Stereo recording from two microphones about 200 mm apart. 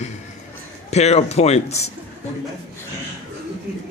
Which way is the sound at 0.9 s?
35° left (ahead or behind).